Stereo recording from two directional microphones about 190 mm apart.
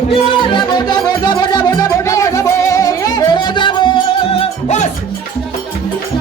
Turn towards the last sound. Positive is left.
turn(degrees=35)  # may be behind; listen again after turning